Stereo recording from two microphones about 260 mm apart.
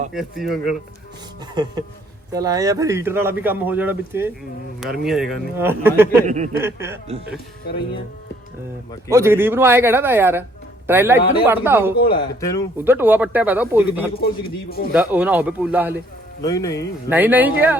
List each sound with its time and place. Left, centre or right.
0.1 s a man's voice: centre
2.3 s a man's voice: centre
6.2 s speech: right
6.6 s speech: centre
9.0 s speech: centre
12.1 s speech: centre
12.7 s speech: centre
14.2 s speech: left
14.9 s speech: centre
16.4 s speech: centre
17.1 s speech: centre